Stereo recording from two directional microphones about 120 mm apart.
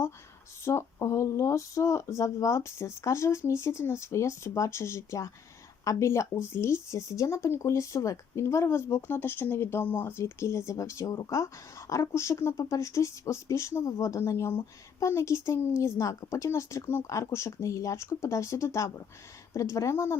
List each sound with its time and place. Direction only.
0.6 s speech: 25° left (ahead or behind)